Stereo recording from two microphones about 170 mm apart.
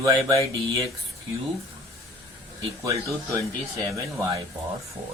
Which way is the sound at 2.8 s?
20° right (ahead or behind).